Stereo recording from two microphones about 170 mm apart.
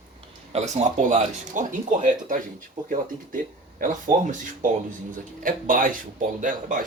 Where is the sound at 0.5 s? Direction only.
40° right (ahead or behind).